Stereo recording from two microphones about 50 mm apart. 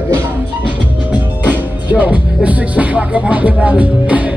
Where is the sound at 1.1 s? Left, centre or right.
Right.